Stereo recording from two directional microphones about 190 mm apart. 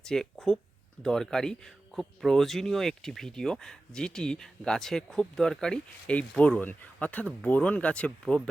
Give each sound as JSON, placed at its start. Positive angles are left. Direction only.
{"t": 0.0, "sound": "speech", "side_deg": 5}